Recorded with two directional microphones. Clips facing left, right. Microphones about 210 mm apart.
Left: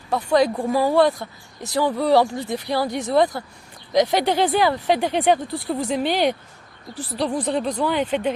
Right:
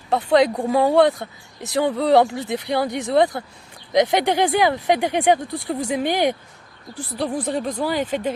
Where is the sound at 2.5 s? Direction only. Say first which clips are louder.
Right 1 dB; 20° right (ahead or behind).